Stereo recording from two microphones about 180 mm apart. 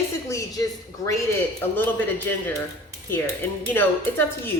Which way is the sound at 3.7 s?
10° left (ahead or behind).